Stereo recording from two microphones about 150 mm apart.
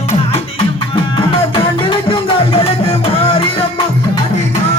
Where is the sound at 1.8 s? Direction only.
35° left (ahead or behind).